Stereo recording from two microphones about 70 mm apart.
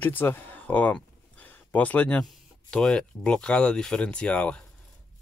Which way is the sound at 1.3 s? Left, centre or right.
Left.